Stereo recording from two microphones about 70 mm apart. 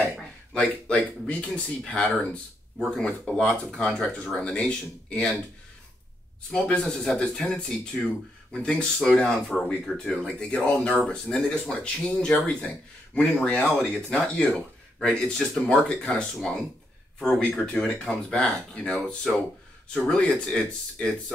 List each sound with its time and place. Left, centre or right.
0.2 s speech: centre
6.5 s speech: centre
16.0 s speech: left
16.3 s speech: centre